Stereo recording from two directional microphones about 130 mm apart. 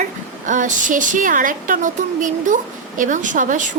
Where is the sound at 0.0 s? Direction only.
75° right (ahead or behind).